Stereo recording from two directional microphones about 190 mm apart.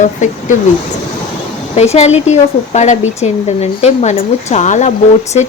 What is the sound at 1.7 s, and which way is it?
Speech, 35° left (ahead or behind).